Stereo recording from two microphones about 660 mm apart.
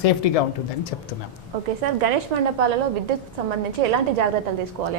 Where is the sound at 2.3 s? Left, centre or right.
Right.